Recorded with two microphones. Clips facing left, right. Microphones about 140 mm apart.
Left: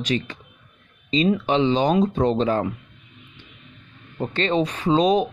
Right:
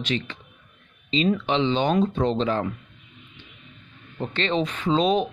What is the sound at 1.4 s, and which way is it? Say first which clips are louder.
Speech: left 3 dB; 40° left (ahead or behind).